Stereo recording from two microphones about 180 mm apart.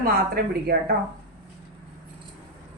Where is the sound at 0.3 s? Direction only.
60° right (ahead or behind).